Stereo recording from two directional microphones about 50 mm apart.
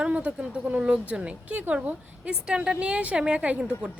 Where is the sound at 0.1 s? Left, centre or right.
Right.